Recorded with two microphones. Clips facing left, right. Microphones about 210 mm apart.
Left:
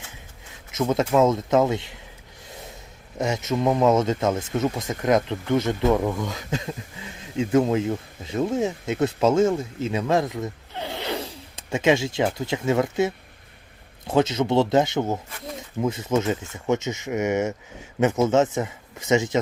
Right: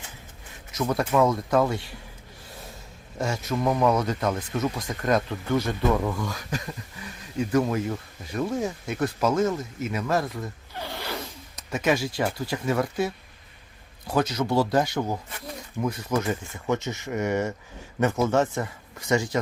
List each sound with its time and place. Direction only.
0.7 s speech: 20° left (ahead or behind)
2.5 s snort: 20° left (ahead or behind)
3.2 s speech: 20° left (ahead or behind)
11.1 s speech: 30° left (ahead or behind)